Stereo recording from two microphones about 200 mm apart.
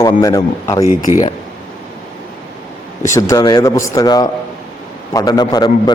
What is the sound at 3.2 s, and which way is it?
A man's voice, 15° left (ahead or behind).